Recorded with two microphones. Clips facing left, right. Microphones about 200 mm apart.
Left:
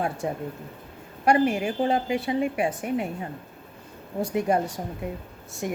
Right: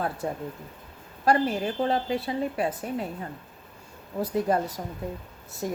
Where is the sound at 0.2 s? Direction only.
15° left (ahead or behind).